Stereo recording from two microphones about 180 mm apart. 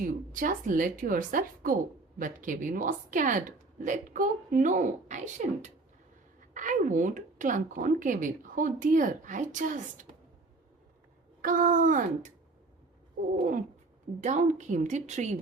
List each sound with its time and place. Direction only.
0.3 s a woman's voice: 50° right (ahead or behind)
11.4 s a woman's voice: 50° right (ahead or behind)
14.2 s a woman's voice: 40° right (ahead or behind)